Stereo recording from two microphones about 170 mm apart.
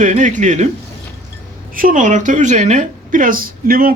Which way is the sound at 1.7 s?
55° right (ahead or behind).